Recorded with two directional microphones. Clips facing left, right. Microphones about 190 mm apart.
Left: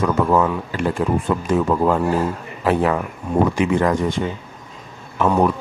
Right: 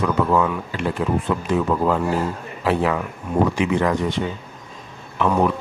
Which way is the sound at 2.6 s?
45° left (ahead or behind).